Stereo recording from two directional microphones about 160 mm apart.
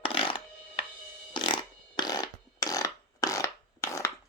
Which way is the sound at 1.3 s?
30° left (ahead or behind).